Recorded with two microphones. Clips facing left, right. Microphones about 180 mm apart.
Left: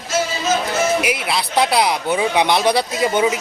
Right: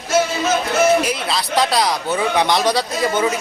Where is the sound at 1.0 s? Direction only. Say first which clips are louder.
Left 1 dB; 10° left (ahead or behind).